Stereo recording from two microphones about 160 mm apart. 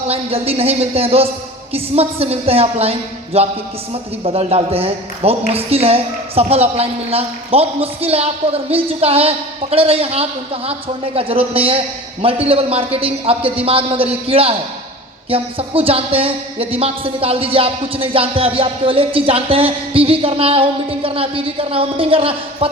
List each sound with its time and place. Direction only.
0.1 s a woman's voice: 35° right (ahead or behind)